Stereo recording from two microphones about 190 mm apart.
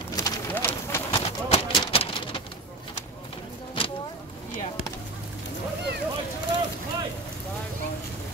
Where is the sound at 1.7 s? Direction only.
25° left (ahead or behind).